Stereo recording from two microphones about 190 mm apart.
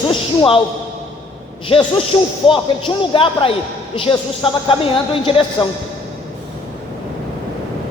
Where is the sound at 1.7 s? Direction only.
25° left (ahead or behind).